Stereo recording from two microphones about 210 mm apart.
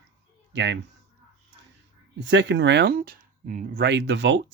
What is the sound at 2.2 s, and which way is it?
Speech, 60° right (ahead or behind).